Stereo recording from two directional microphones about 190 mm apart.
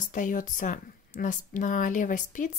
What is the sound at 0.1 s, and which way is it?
Speech, 45° left (ahead or behind).